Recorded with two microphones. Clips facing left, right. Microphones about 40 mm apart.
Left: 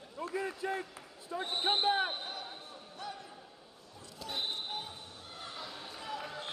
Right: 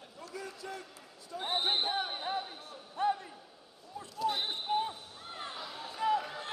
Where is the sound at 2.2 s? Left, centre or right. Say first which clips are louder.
Right 6 dB; right.